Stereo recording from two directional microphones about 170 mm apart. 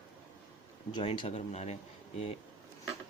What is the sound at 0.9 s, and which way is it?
Speech, 30° left (ahead or behind).